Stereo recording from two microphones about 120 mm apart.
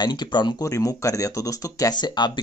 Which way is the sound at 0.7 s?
25° left (ahead or behind).